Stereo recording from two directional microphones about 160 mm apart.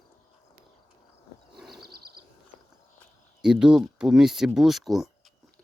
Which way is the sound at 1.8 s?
75° right (ahead or behind).